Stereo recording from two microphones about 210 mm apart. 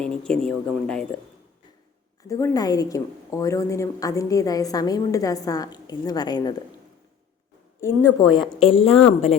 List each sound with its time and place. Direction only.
0.0 s speech: 5° left (ahead or behind)
2.2 s a woman's voice: 15° left (ahead or behind)
8.0 s speech: 5° right (ahead or behind)
8.5 s a woman's voice: 25° left (ahead or behind)